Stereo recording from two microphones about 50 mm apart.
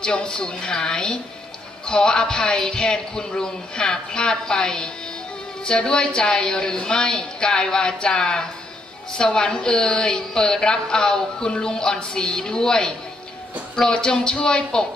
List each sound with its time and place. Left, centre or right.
0.0 s a woman's voice: centre